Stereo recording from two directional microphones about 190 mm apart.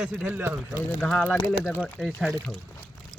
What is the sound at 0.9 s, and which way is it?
Speech, 5° left (ahead or behind).